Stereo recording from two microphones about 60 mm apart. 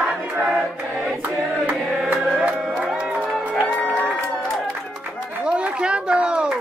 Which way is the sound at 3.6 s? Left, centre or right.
Left.